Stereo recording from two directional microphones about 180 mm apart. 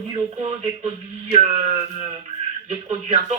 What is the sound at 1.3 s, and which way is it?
A man's voice, 35° right (ahead or behind).